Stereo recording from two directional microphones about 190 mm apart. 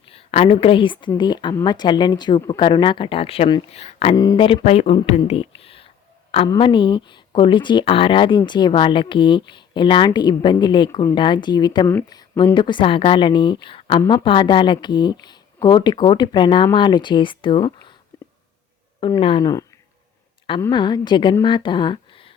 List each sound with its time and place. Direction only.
0.1 s a woman's voice: 30° left (ahead or behind)
4.1 s speech: 20° left (ahead or behind)
18.1 s a sound: 10° left (ahead or behind)
18.9 s speech: 25° left (ahead or behind)